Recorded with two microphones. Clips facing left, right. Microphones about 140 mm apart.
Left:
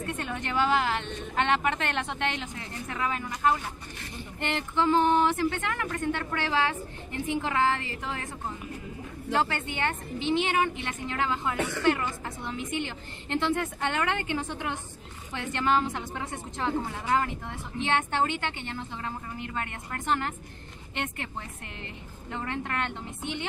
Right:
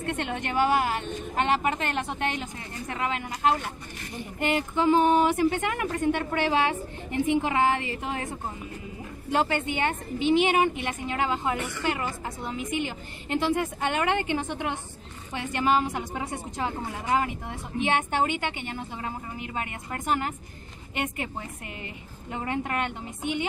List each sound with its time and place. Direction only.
0.0 s a woman's voice: 85° right; by 2.5 s 40° right (ahead or behind)
4.4 s a woman's voice: 10° right (ahead or behind)
9.3 s a woman's voice: 20° right (ahead or behind)